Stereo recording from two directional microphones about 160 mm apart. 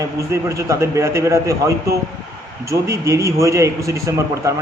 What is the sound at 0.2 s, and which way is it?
A man's voice, 20° right (ahead or behind).